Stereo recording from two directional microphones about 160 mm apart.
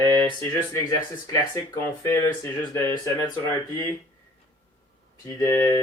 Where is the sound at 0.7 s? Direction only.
20° left (ahead or behind).